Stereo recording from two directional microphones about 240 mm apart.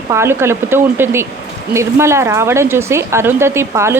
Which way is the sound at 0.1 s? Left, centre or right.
Centre.